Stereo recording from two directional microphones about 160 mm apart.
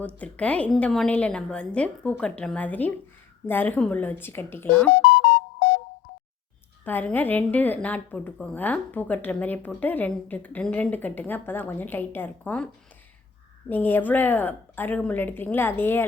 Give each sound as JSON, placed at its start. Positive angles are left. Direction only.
{"t": 0.0, "sound": "a woman's voice", "side_deg": 10}
{"t": 6.8, "sound": "a woman's voice", "side_deg": 10}
{"t": 13.7, "sound": "a woman's voice", "side_deg": 10}